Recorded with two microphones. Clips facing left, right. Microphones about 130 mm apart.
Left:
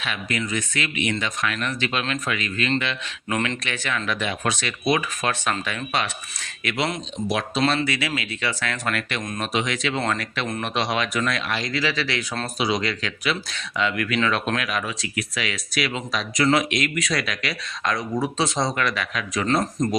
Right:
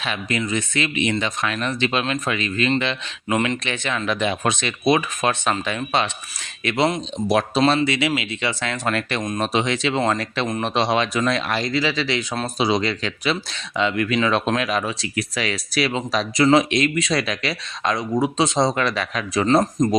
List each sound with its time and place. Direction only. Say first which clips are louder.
0.0 s speech: right 3 dB; 25° right (ahead or behind)
3.2 s speech: right 4 dB; 15° right (ahead or behind)
7.3 s speech: right 6 dB; 40° right (ahead or behind)
7.6 s speech: right 4 dB; 25° right (ahead or behind)
11.7 s speech: right 3 dB; 25° right (ahead or behind)
19.5 s speech: right 5 dB; 20° right (ahead or behind)